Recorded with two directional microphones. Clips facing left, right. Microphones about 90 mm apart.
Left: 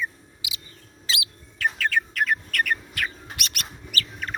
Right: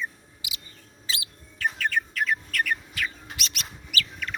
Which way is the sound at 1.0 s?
90° left.